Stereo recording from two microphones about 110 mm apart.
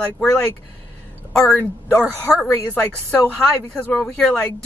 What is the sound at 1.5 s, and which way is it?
Speech, 15° left (ahead or behind).